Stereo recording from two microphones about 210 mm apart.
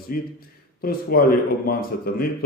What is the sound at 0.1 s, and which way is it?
Speech, 45° left (ahead or behind).